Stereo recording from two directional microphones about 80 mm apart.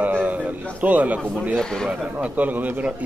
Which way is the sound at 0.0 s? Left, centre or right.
Right.